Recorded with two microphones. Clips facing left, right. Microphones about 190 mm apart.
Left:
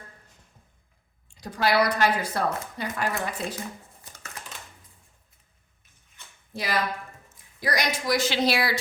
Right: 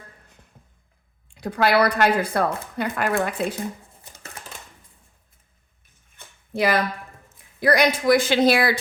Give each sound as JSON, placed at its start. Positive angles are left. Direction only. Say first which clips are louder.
{"t": 1.3, "sound": "a woman's voice", "louder": "right 4 dB", "side_deg": -60}
{"t": 6.1, "sound": "a sound", "louder": "right 11 dB", "side_deg": -60}
{"t": 7.6, "sound": "a woman's voice", "louder": "right 9 dB", "side_deg": -60}